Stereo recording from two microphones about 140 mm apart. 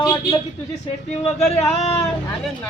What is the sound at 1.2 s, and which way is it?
Music, centre (ahead or behind).